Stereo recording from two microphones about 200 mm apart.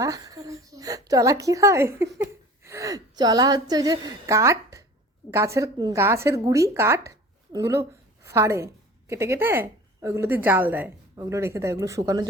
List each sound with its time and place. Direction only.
0.0 s a woman's voice: 15° right (ahead or behind)
2.1 s a sound: 15° right (ahead or behind)
5.3 s a woman's voice: 15° right (ahead or behind)